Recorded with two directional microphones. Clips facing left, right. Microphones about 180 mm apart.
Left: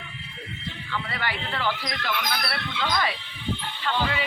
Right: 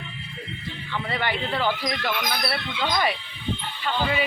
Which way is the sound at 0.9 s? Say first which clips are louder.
Right 4 dB; 20° right (ahead or behind).